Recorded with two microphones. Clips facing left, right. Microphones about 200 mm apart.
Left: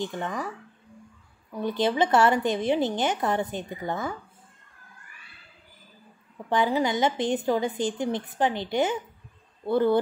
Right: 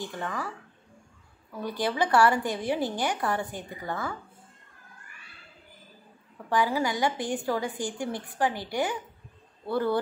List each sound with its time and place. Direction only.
0.0 s a woman's voice: 20° left (ahead or behind)
1.5 s a woman's voice: 20° left (ahead or behind)
6.5 s a woman's voice: 20° left (ahead or behind)